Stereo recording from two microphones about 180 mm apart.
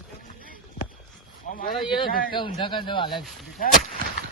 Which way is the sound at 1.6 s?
50° left (ahead or behind).